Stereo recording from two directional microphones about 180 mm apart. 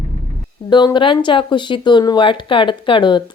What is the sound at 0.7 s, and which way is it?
Speech, 25° left (ahead or behind).